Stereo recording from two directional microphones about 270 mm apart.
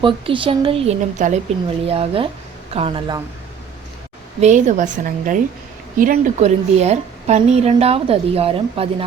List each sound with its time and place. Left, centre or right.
0.0 s a woman's voice: centre
4.4 s a woman's voice: right